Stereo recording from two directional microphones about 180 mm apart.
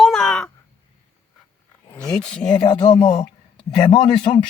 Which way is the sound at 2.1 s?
5° left (ahead or behind).